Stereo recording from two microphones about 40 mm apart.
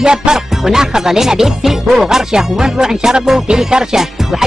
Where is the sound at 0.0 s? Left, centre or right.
Centre.